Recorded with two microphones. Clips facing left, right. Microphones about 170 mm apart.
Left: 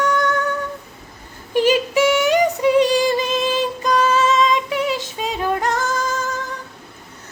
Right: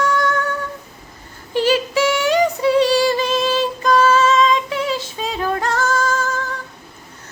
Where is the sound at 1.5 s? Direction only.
15° left (ahead or behind).